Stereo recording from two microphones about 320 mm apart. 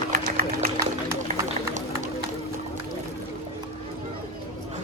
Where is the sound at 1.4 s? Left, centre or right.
Right.